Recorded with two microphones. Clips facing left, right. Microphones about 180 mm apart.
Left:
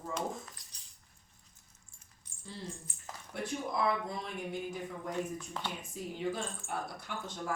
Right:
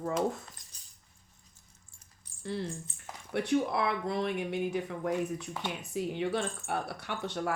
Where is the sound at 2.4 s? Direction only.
70° right (ahead or behind).